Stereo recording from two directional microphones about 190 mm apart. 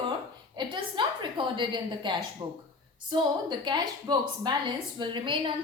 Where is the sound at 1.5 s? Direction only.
25° right (ahead or behind).